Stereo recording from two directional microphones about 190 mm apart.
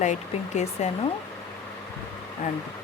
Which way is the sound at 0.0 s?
40° left (ahead or behind).